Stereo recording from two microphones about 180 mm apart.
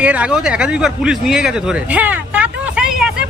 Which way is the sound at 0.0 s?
5° right (ahead or behind).